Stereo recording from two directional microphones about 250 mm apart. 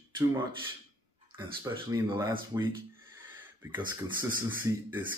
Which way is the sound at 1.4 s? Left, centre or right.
Centre.